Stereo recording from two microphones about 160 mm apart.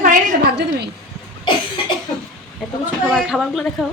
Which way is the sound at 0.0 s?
60° right (ahead or behind).